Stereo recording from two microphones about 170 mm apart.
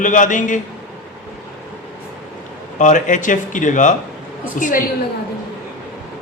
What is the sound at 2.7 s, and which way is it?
A man's voice, 50° left (ahead or behind).